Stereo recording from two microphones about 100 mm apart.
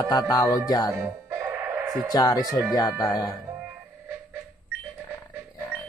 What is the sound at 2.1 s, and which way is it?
Music, 40° left (ahead or behind).